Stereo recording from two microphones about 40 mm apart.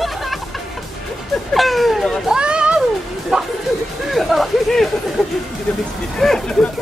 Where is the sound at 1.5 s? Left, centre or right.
Centre.